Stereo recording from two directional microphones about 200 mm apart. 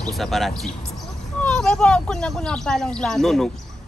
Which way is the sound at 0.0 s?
Centre (ahead or behind).